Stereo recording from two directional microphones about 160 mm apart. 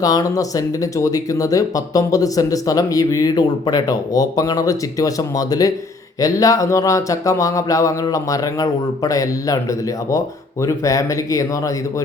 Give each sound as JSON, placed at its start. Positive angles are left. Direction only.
{"t": 0.0, "sound": "speech", "side_deg": 20}